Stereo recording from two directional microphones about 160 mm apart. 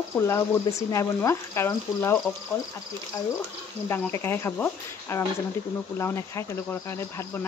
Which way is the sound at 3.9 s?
15° left (ahead or behind).